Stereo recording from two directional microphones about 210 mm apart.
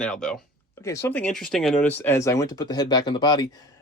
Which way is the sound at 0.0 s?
5° left (ahead or behind).